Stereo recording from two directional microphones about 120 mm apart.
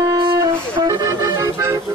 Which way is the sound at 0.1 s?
35° right (ahead or behind).